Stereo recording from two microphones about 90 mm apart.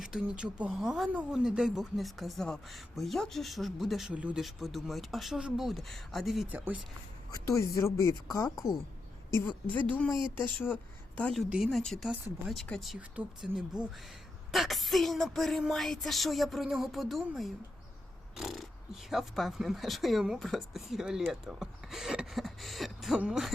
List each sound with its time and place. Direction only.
0.0 s speech: 10° right (ahead or behind)
4.1 s speech: 15° right (ahead or behind)
4.4 s speech: centre (ahead or behind)
7.4 s speech: 35° left (ahead or behind)
9.7 s speech: 20° left (ahead or behind)
11.2 s a woman's voice: 5° left (ahead or behind)
11.4 s speech: 10° right (ahead or behind)
11.8 s speech: 5° left (ahead or behind)
18.3 s speech: centre (ahead or behind)